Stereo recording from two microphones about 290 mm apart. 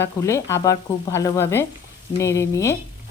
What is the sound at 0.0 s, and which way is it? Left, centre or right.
Speech, centre.